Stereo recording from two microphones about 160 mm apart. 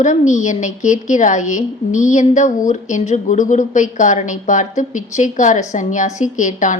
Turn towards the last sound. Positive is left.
turn(degrees=50)  # may be behind; listen again after turning